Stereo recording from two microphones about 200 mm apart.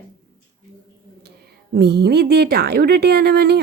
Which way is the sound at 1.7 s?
55° right (ahead or behind).